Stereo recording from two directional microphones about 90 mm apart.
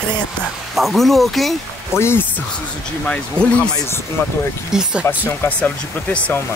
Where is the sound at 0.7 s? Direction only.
Centre (ahead or behind).